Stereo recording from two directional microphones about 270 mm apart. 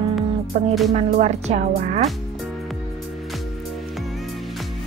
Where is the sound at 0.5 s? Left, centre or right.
Right.